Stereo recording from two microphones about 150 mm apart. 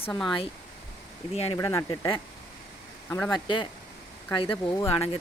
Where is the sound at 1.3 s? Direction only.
45° left (ahead or behind).